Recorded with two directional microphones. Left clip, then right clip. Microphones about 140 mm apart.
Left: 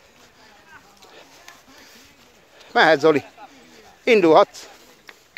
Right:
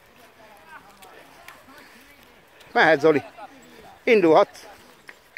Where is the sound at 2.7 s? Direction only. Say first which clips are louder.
Left 2 dB; 30° left (ahead or behind).